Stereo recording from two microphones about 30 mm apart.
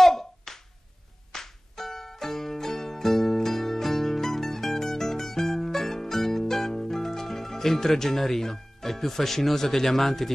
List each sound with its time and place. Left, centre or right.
0.0 s finger snapping: centre
1.3 s music: centre